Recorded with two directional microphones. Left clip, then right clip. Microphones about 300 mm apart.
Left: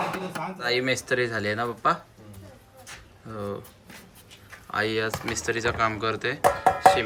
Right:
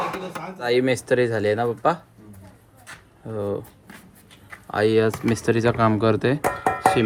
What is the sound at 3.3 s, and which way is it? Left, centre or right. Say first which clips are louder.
Speech: right 7 dB; centre.